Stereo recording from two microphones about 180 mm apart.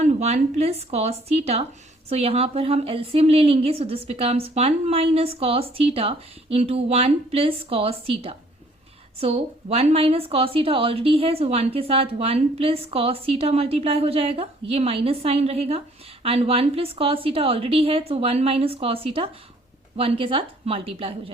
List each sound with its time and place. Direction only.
0.0 s a woman's voice: 40° right (ahead or behind)